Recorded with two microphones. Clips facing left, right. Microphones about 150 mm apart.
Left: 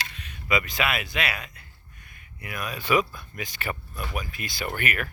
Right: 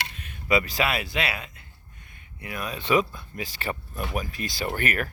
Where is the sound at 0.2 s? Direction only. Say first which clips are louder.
Right 1 dB; 50° right (ahead or behind).